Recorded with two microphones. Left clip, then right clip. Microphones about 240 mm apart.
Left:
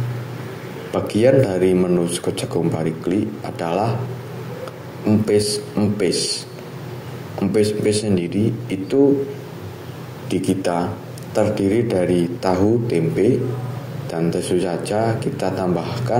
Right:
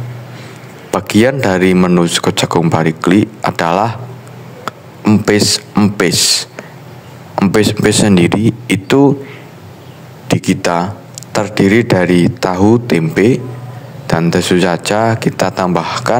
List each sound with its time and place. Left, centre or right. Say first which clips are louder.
0.9 s speech: right 3 dB; right
7.3 s speech: right 6 dB; right
10.2 s speech: right 6 dB; right